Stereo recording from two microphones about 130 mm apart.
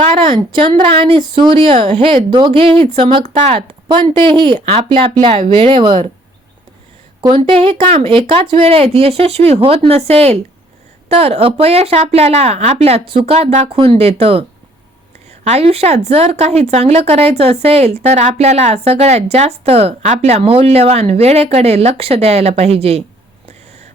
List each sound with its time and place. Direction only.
0.0 s speech: 45° right (ahead or behind)
7.2 s speech: 40° right (ahead or behind)
15.4 s speech: 50° right (ahead or behind)